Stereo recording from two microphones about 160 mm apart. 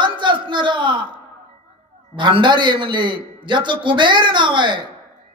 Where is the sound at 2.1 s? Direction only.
30° right (ahead or behind).